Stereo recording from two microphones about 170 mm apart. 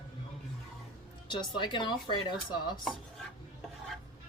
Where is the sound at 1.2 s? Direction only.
25° left (ahead or behind).